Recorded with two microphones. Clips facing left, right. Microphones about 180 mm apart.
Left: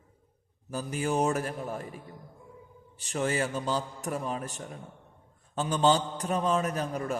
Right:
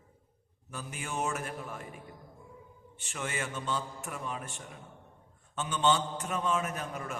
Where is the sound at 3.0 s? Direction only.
35° left (ahead or behind).